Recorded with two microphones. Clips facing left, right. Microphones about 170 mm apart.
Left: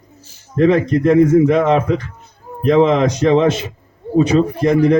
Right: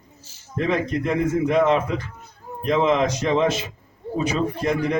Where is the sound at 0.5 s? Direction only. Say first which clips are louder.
Left 9 dB; 40° left (ahead or behind).